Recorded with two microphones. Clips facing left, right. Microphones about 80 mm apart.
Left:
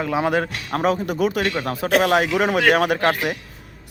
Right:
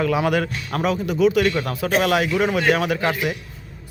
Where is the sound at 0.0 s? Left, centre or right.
Left.